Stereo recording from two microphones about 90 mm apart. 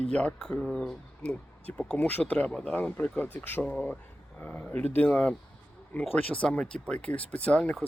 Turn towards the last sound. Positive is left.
turn(degrees=15)  # may be behind; listen again after turning